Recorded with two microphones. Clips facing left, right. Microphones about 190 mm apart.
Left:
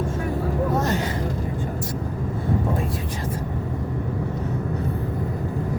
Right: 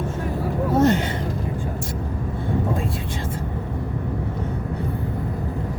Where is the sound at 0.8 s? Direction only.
25° right (ahead or behind).